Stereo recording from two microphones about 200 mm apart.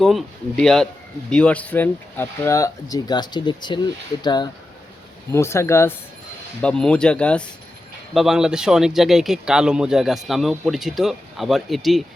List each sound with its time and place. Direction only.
0.0 s speech: centre (ahead or behind)